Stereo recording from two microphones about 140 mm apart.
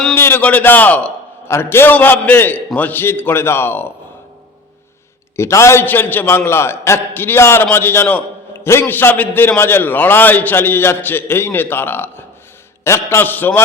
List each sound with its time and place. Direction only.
0.1 s a man's voice: 15° left (ahead or behind)
5.4 s a man's voice: 20° left (ahead or behind)